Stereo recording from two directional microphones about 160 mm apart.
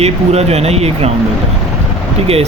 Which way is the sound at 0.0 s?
40° right (ahead or behind).